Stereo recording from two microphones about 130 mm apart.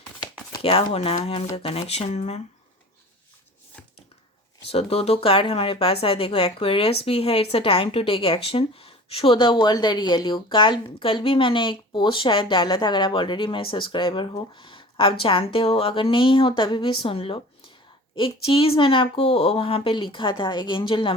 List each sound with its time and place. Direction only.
0.6 s speech: 45° left (ahead or behind)
4.7 s speech: 50° left (ahead or behind)